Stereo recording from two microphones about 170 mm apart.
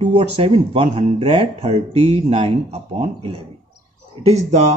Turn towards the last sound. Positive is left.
turn(degrees=-40)  # may be behind; listen again after turning